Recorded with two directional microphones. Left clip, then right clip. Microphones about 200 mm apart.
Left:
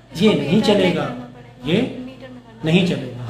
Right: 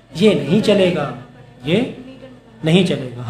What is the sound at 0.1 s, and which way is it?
Speech, 35° right (ahead or behind).